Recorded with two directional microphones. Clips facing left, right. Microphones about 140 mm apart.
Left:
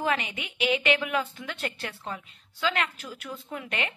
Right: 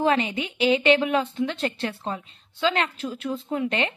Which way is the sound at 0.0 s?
30° right (ahead or behind).